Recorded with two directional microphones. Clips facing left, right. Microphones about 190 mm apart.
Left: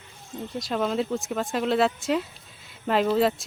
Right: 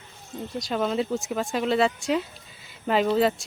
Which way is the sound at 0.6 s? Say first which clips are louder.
Even; centre (ahead or behind).